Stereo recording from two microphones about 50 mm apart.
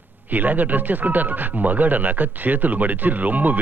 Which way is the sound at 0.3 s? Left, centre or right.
Right.